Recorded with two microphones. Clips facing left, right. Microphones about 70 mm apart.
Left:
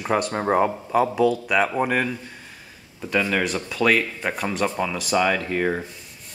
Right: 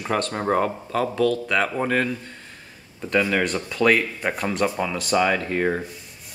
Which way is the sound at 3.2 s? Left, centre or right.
Centre.